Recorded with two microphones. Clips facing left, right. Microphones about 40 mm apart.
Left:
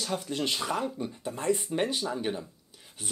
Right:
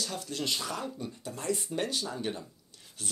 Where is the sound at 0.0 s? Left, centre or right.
Left.